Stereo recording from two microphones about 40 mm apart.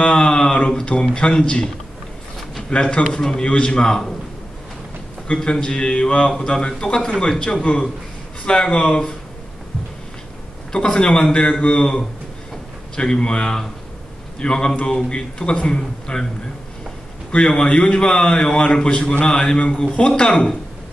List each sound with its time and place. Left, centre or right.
0.0 s a sound: left
1.1 s a man's voice: left
2.7 s a man's voice: left
5.3 s a man's voice: left
10.7 s a man's voice: left
17.3 s a man's voice: left